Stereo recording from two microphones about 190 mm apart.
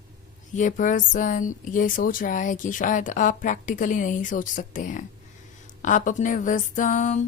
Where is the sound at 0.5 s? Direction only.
40° left (ahead or behind).